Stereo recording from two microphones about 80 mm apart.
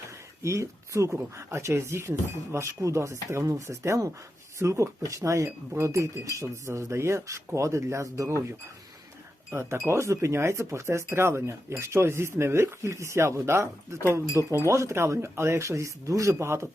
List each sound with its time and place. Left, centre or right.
0.4 s speech: right